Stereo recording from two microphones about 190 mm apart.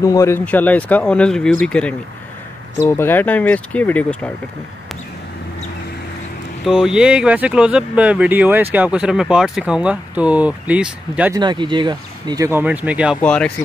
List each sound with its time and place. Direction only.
0.0 s speech: 15° left (ahead or behind)
6.6 s speech: 5° right (ahead or behind)
11.3 s speech: 25° right (ahead or behind); by 13.2 s 5° right (ahead or behind)
13.2 s speech: 5° left (ahead or behind)